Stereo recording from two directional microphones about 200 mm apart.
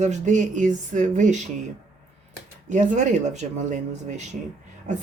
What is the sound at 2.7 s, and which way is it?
Speech, 35° right (ahead or behind).